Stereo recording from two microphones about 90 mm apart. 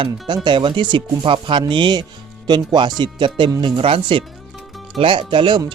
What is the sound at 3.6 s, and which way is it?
Speech, 90° right.